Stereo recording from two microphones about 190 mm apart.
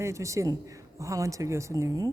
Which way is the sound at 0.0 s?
15° right (ahead or behind).